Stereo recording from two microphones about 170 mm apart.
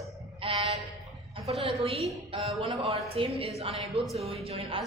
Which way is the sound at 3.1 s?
35° right (ahead or behind).